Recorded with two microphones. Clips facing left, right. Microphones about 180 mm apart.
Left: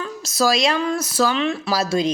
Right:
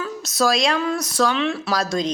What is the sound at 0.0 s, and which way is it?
Speech, centre (ahead or behind).